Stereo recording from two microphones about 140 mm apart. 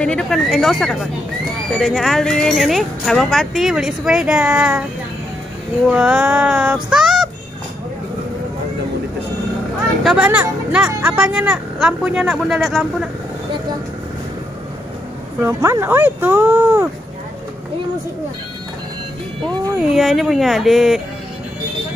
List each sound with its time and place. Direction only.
0.0 s speech: 5° left (ahead or behind)
5.9 s speech: 5° right (ahead or behind)
10.0 s speech: 10° right (ahead or behind)
15.4 s speech: 20° right (ahead or behind)
19.8 s speech: centre (ahead or behind)